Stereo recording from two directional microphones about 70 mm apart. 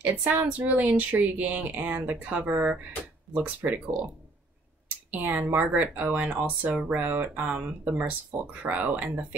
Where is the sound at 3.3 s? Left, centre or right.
Right.